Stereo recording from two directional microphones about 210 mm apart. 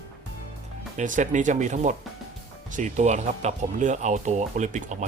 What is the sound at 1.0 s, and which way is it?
Speech, 35° right (ahead or behind).